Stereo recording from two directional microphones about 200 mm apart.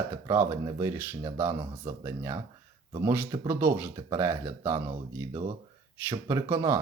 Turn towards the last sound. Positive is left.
turn(degrees=-15)  # may be behind; listen again after turning